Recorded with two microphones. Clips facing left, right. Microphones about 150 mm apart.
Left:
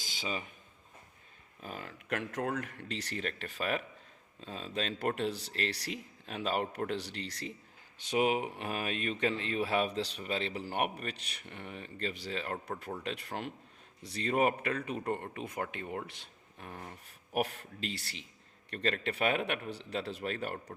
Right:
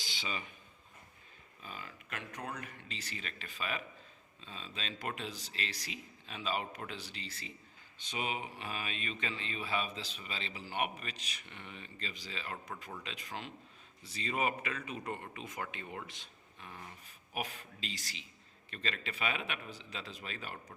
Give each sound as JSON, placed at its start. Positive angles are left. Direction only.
{"t": 0.0, "sound": "a sound", "side_deg": 45}
{"t": 1.6, "sound": "speech", "side_deg": 60}
{"t": 2.6, "sound": "speech", "side_deg": 70}